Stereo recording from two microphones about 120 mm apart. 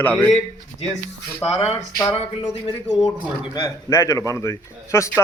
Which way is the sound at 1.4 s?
20° left (ahead or behind).